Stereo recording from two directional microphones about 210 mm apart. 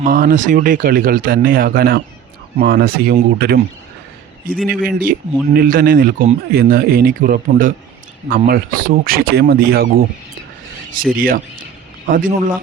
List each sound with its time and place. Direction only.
0.0 s speech: 40° right (ahead or behind)